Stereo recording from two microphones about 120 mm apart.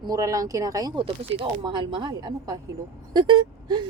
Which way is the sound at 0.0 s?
30° right (ahead or behind).